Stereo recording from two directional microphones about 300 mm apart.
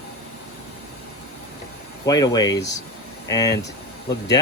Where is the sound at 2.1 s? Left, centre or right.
Centre.